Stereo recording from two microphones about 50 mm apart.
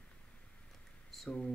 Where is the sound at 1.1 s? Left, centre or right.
Centre.